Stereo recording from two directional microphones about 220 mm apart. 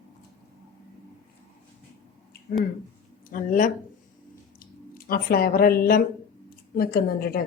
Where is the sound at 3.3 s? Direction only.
35° left (ahead or behind).